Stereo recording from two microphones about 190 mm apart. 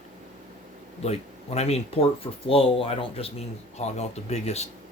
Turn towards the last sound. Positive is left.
turn(degrees=35)  # may be behind; listen again after turning